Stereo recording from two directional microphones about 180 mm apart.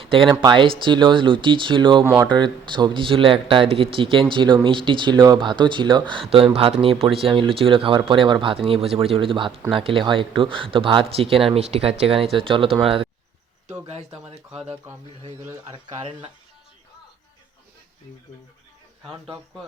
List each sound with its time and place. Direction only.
0.0 s speech: 30° right (ahead or behind)
15.7 s speech: 30° right (ahead or behind)